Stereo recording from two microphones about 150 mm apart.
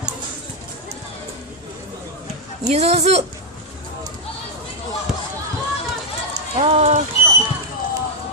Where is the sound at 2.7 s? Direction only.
45° right (ahead or behind).